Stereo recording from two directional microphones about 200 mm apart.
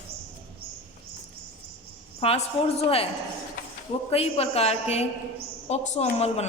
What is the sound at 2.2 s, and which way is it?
Speech, 30° left (ahead or behind).